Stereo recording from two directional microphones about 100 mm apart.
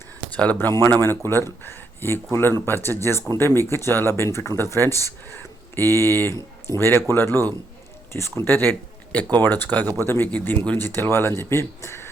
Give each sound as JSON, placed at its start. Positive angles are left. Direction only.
{"t": 0.3, "sound": "speech", "side_deg": 15}